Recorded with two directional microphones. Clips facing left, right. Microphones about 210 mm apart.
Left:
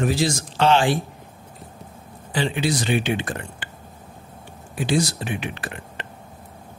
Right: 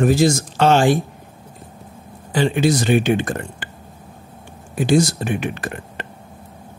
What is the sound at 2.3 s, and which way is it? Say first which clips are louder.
Speech: right 6 dB; 45° right (ahead or behind).